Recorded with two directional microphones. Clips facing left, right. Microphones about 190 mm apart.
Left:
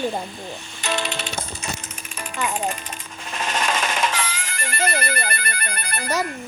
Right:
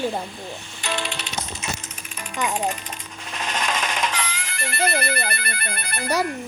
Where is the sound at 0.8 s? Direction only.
45° left (ahead or behind).